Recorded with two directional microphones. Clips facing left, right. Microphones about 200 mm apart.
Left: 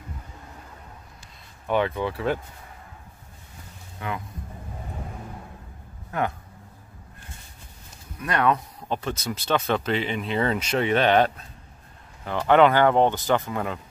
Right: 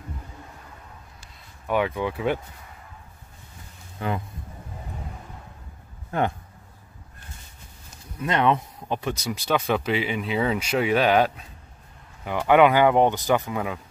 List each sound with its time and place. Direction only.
1.7 s speech: 5° right (ahead or behind)
4.0 s speech: 30° right (ahead or behind)
6.1 s speech: 30° right (ahead or behind)
8.2 s speech: 25° right (ahead or behind); by 13.7 s 5° right (ahead or behind)